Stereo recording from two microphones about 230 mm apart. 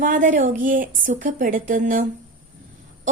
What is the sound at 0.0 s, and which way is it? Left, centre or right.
A woman's voice, right.